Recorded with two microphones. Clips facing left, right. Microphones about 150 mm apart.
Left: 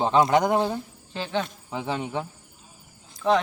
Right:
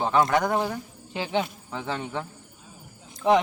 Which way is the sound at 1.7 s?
15° left (ahead or behind).